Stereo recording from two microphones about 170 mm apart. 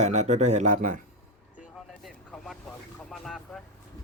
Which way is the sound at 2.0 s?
Centre (ahead or behind).